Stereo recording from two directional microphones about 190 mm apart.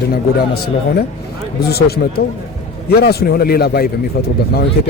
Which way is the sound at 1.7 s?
55° left (ahead or behind).